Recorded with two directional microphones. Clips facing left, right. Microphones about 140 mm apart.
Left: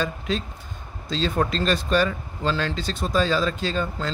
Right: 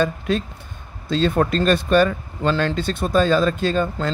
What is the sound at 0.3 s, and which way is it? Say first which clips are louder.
Speech: right 5 dB; 55° right (ahead or behind).